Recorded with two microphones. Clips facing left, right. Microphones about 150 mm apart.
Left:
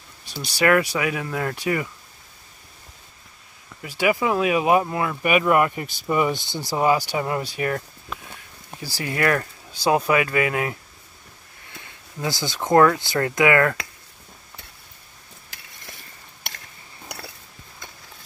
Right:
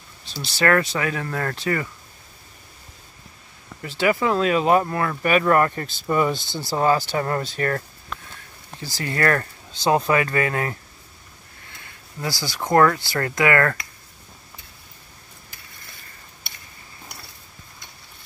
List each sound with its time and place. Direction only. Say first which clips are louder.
0.2 s speech: left 1 dB; 15° left (ahead or behind)
3.8 s speech: right 1 dB; 10° left (ahead or behind)
11.7 s speech: left 2 dB; 20° left (ahead or behind)